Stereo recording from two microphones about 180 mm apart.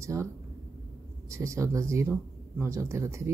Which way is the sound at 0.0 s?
15° right (ahead or behind).